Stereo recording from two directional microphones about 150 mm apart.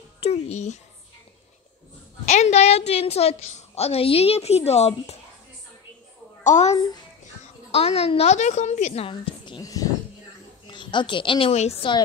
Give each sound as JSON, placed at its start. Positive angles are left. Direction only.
{"t": 0.2, "sound": "a woman's voice", "side_deg": 45}
{"t": 2.2, "sound": "a woman's voice", "side_deg": 50}
{"t": 6.4, "sound": "a woman's voice", "side_deg": 50}